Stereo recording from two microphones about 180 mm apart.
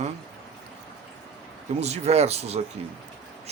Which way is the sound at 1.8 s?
35° right (ahead or behind).